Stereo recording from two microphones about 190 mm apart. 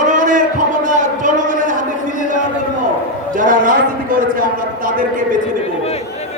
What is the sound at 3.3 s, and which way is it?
A man's voice, 45° right (ahead or behind).